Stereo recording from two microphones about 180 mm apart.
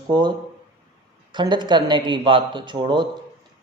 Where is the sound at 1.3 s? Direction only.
25° right (ahead or behind).